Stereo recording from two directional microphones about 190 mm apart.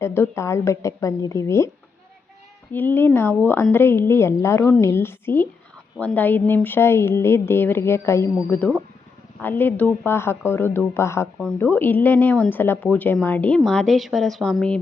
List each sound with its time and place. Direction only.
0.0 s a woman's voice: 15° left (ahead or behind)
2.7 s a woman's voice: 10° left (ahead or behind)